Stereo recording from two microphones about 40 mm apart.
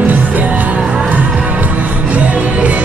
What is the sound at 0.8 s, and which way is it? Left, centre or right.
Music, right.